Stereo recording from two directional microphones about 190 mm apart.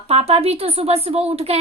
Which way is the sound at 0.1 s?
30° right (ahead or behind).